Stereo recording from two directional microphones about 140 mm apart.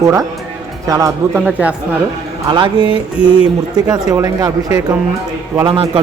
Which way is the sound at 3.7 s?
30° right (ahead or behind).